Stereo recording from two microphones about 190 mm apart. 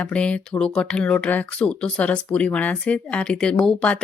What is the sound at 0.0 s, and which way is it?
Speech, 5° left (ahead or behind).